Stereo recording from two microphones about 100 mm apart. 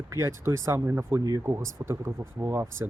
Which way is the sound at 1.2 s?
35° right (ahead or behind).